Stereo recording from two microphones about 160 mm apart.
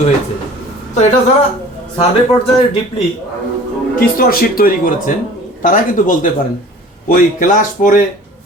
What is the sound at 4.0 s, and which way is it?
Speech, 65° left (ahead or behind).